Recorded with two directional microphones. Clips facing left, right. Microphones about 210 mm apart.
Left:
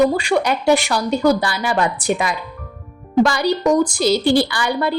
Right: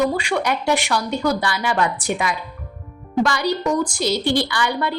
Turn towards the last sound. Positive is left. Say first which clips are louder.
# left 2 dB
turn(degrees=35)  # may be behind; listen again after turning